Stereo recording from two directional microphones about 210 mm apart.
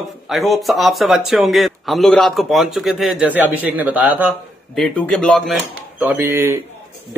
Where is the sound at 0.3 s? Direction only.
Centre (ahead or behind).